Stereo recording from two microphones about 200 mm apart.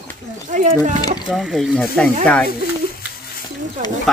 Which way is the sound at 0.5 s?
40° right (ahead or behind).